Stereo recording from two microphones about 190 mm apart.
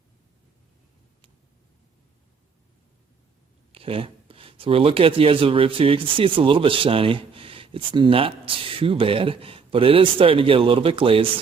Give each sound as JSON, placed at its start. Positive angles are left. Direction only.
{"t": 3.7, "sound": "speech", "side_deg": -30}